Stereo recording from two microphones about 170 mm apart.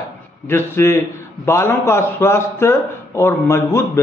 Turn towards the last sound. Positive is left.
turn(degrees=15)  # may be behind; listen again after turning